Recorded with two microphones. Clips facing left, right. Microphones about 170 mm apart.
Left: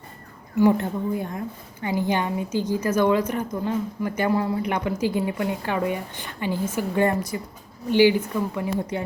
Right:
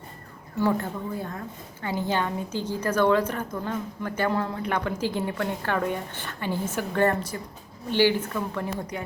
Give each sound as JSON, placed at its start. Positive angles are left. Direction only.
{"t": 0.6, "sound": "a woman's voice", "side_deg": 15}
{"t": 8.9, "sound": "speech", "side_deg": 25}